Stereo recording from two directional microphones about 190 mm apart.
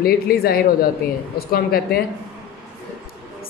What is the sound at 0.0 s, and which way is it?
Speech, 50° left (ahead or behind).